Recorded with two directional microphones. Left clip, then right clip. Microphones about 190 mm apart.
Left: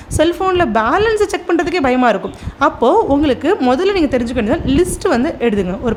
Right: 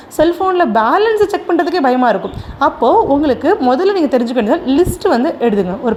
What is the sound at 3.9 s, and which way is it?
Speech, 25° left (ahead or behind).